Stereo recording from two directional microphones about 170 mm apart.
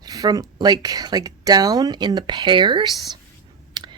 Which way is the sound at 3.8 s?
25° right (ahead or behind).